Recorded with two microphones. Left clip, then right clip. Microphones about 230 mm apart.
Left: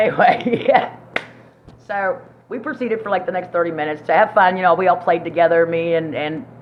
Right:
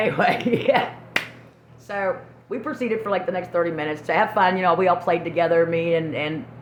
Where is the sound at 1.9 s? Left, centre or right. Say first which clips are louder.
Left 4 dB; right.